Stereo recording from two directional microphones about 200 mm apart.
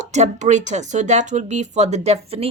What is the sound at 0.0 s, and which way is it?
Speech, 35° right (ahead or behind).